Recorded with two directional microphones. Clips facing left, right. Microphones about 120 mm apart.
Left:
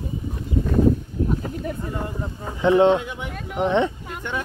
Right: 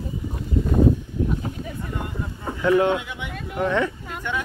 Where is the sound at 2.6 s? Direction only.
25° left (ahead or behind).